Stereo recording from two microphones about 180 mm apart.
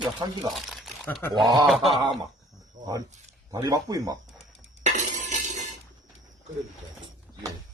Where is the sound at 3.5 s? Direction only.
20° right (ahead or behind).